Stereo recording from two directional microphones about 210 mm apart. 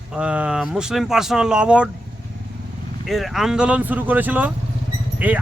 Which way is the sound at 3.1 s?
Centre (ahead or behind).